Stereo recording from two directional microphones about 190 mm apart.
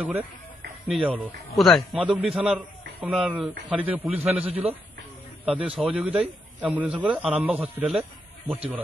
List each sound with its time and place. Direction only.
0.0 s a man's voice: 10° right (ahead or behind)
4.1 s speech: 30° right (ahead or behind)
5.4 s a man's voice: 5° right (ahead or behind)